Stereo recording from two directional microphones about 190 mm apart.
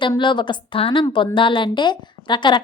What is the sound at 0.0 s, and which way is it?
A woman's voice, 25° left (ahead or behind).